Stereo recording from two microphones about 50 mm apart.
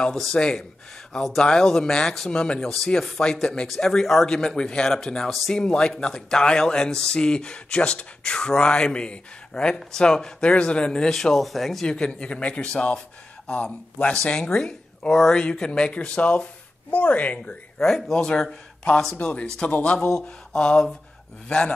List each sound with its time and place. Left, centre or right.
0.1 s speech: centre
0.4 s speech: centre
10.9 s speech: centre
11.8 s speech: centre
14.1 s speech: centre
17.7 s speech: centre